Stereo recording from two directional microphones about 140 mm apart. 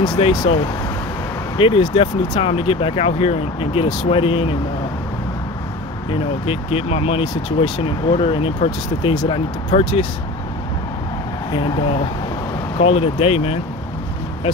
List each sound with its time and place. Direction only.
0.0 s speech: 35° left (ahead or behind)
1.6 s speech: 35° left (ahead or behind)
6.4 s speech: 45° left (ahead or behind)
11.5 s speech: 40° left (ahead or behind)